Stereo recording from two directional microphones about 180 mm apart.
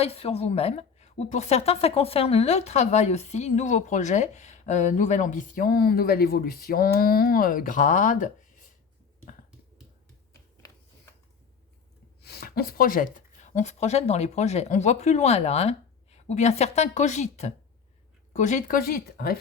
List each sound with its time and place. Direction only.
0.0 s a woman's voice: 35° left (ahead or behind)
12.2 s speech: 60° left (ahead or behind)